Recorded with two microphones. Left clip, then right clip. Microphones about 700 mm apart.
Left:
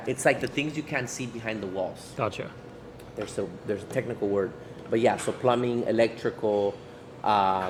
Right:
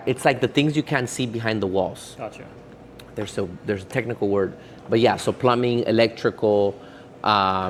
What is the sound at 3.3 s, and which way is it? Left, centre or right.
Speech, right.